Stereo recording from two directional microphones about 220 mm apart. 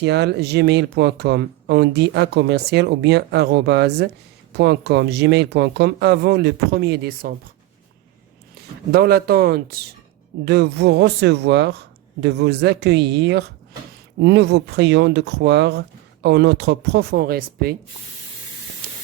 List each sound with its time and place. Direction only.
0.0 s speech: 50° right (ahead or behind)
8.9 s speech: 45° right (ahead or behind)